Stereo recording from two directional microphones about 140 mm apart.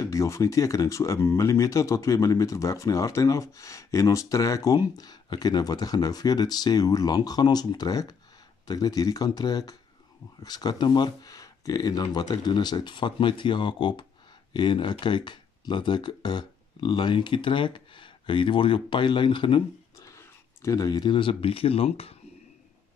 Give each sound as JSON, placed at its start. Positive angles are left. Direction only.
{"t": 0.0, "sound": "speech", "side_deg": 20}
{"t": 20.0, "sound": "speech", "side_deg": 20}